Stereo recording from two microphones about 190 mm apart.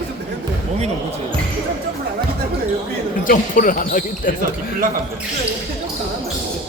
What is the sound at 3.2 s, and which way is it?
Speech, 45° left (ahead or behind).